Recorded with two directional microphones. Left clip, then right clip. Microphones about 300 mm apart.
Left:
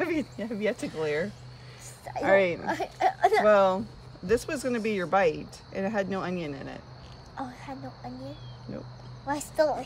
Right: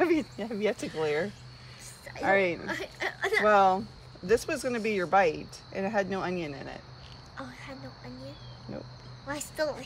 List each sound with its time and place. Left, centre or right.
0.0 s speech: centre
2.6 s speech: left
3.4 s speech: centre
7.3 s speech: centre
9.3 s speech: centre